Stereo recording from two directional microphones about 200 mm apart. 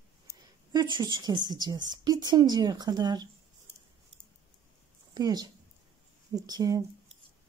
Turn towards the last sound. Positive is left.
turn(degrees=-20)  # may be behind; listen again after turning